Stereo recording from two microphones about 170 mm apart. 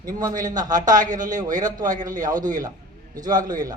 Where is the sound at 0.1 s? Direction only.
20° right (ahead or behind).